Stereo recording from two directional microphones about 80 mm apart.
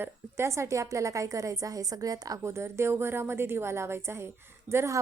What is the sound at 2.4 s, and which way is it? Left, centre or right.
A woman's voice, right.